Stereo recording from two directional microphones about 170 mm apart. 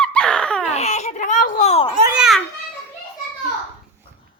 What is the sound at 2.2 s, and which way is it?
Children playing, centre (ahead or behind).